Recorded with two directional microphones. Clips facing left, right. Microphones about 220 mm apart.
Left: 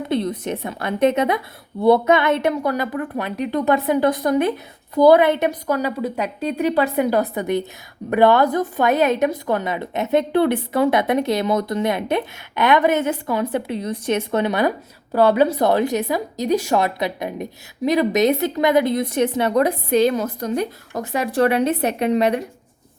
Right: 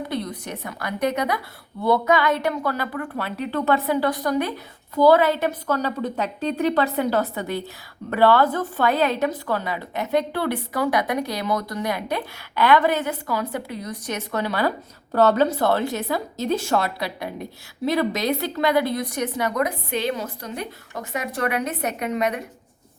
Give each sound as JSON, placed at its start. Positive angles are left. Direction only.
{"t": 0.1, "sound": "a woman's voice", "side_deg": 25}